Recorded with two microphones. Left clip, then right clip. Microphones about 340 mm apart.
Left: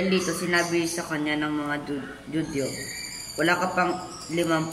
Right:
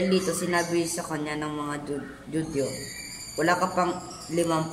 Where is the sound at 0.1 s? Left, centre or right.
Centre.